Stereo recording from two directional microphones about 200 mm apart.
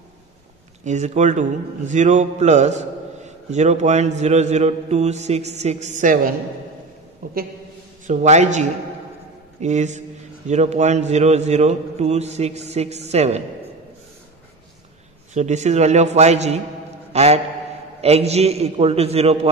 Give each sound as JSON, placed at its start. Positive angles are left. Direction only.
{"t": 0.8, "sound": "a man's voice", "side_deg": -35}
{"t": 8.1, "sound": "a man's voice", "side_deg": -35}
{"t": 15.3, "sound": "a man's voice", "side_deg": -35}